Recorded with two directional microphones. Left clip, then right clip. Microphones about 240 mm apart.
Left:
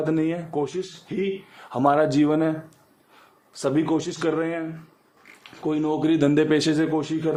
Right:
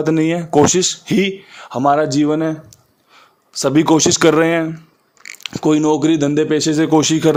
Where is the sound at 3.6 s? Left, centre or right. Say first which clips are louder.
Right 10 dB; right.